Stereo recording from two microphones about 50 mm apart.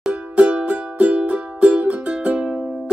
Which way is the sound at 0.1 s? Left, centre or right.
Right.